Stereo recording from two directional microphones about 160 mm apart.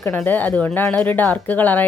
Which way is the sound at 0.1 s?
10° left (ahead or behind).